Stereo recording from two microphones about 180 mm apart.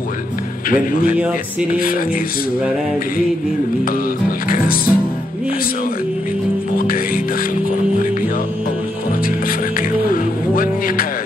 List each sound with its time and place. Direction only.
0.7 s speech: 50° left (ahead or behind)
4.5 s speech: 55° left (ahead or behind)
9.2 s music: 50° left (ahead or behind)